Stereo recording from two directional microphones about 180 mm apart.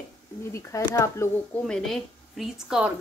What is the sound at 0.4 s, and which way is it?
A woman's voice, 15° left (ahead or behind).